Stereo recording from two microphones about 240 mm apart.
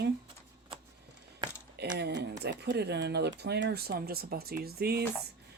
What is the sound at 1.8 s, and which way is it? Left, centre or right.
A woman's voice, right.